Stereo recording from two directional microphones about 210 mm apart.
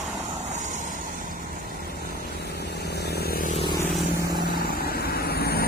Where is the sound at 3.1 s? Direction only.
45° left (ahead or behind).